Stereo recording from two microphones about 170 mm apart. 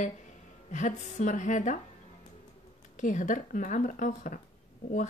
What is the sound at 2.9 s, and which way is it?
Speech, 45° left (ahead or behind).